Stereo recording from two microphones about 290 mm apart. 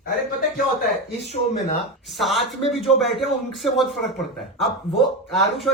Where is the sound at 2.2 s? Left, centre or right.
Centre.